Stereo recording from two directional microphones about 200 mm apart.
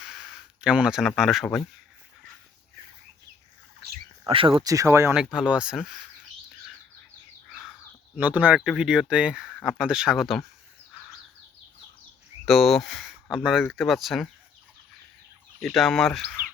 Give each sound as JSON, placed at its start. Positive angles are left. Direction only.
{"t": 0.0, "sound": "speech", "side_deg": 0}
{"t": 4.3, "sound": "speech", "side_deg": -25}
{"t": 5.1, "sound": "speech", "side_deg": -5}
{"t": 8.1, "sound": "speech", "side_deg": -10}
{"t": 12.5, "sound": "speech", "side_deg": 0}
{"t": 15.6, "sound": "speech", "side_deg": 0}